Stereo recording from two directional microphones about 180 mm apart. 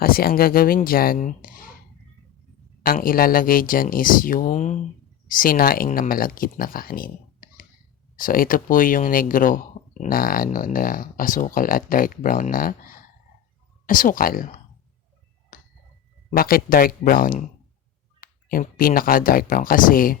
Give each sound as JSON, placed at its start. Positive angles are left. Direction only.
{"t": 0.0, "sound": "speech", "side_deg": 55}
{"t": 2.8, "sound": "speech", "side_deg": 50}
{"t": 5.3, "sound": "speech", "side_deg": 50}
{"t": 15.5, "sound": "tuning fork", "side_deg": 50}
{"t": 16.3, "sound": "speech", "side_deg": 55}